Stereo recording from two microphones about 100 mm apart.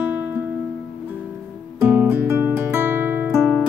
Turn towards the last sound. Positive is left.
turn(degrees=-20)  # may be behind; listen again after turning